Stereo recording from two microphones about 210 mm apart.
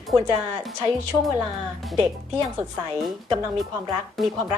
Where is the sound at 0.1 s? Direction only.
Centre (ahead or behind).